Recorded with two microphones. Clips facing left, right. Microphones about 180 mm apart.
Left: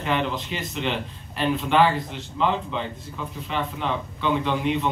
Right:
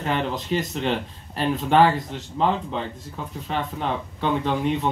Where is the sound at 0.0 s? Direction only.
40° right (ahead or behind).